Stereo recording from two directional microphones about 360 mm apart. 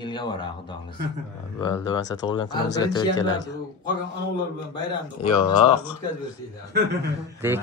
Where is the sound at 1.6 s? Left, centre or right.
Centre.